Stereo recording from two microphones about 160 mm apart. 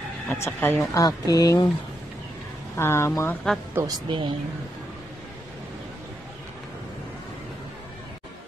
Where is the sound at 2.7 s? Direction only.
15° left (ahead or behind).